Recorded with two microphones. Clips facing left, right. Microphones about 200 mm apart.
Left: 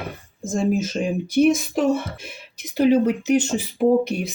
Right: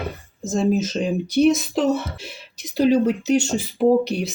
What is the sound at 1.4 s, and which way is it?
Speech, 10° left (ahead or behind).